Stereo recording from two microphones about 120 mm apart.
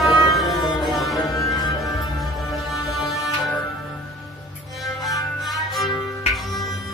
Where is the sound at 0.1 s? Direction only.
45° left (ahead or behind).